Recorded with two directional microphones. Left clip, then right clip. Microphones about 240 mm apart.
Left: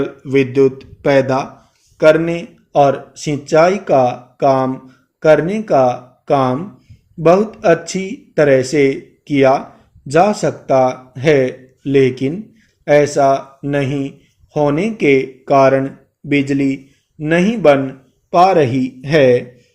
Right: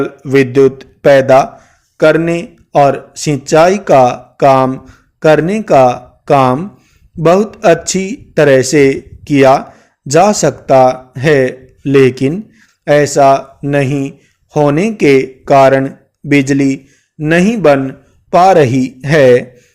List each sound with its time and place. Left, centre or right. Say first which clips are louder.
0.0 s a man's voice: right 4 dB; right